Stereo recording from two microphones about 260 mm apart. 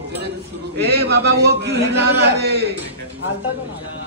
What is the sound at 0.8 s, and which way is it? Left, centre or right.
A man's voice, right.